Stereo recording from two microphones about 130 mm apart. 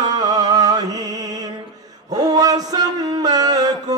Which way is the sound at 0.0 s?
30° right (ahead or behind).